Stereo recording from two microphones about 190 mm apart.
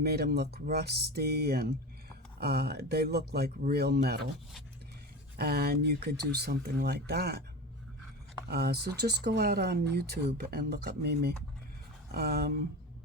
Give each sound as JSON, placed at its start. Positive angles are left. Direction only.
{"t": 0.0, "sound": "speech", "side_deg": -55}
{"t": 5.4, "sound": "speech", "side_deg": -55}
{"t": 8.4, "sound": "speech", "side_deg": -55}